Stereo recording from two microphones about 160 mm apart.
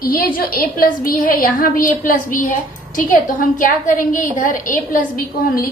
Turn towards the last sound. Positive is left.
turn(degrees=65)  # may be behind; listen again after turning